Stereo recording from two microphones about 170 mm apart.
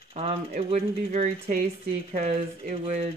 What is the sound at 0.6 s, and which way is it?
Speech, 40° right (ahead or behind).